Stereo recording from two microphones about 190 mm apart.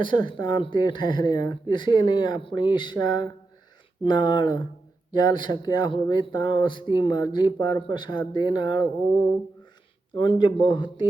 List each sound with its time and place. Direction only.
0.0 s speech: 25° left (ahead or behind)
10.2 s speech: 25° left (ahead or behind)